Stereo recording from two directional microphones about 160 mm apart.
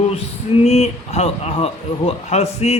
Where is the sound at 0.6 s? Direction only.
40° left (ahead or behind).